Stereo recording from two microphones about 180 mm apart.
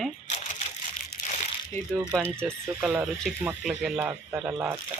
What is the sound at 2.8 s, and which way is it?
Speech, 5° right (ahead or behind).